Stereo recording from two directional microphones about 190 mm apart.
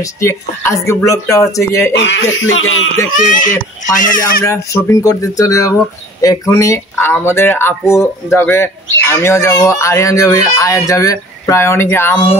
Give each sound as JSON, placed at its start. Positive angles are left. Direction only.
{"t": 0.0, "sound": "speech", "side_deg": 15}
{"t": 2.0, "sound": "speech", "side_deg": 70}
{"t": 3.3, "sound": "speech", "side_deg": 45}
{"t": 4.5, "sound": "speech", "side_deg": 15}